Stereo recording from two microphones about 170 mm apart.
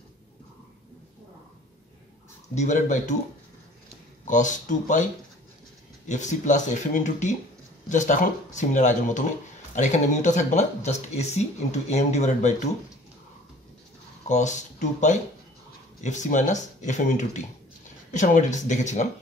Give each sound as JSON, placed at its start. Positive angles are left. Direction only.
{"t": 2.5, "sound": "speech", "side_deg": 45}
{"t": 4.3, "sound": "speech", "side_deg": 50}
{"t": 6.0, "sound": "speech", "side_deg": 45}
{"t": 14.3, "sound": "speech", "side_deg": 45}